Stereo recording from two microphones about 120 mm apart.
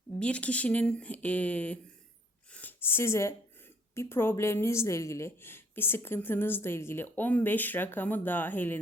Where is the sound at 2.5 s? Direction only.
15° left (ahead or behind).